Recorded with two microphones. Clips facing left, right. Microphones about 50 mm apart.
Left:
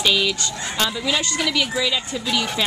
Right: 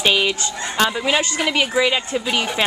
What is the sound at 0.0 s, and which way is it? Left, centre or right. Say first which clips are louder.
Speech: right 2 dB; right.